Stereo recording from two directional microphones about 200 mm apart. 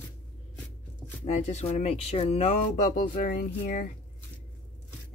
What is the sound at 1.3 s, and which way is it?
Speech, 35° left (ahead or behind).